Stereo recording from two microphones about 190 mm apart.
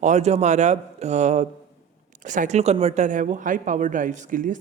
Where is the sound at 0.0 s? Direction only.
35° right (ahead or behind).